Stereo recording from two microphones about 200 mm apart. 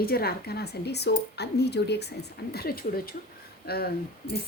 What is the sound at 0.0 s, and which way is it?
A woman's voice, 50° left (ahead or behind).